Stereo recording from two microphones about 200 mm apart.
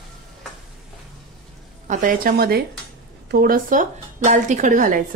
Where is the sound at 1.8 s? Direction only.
40° right (ahead or behind).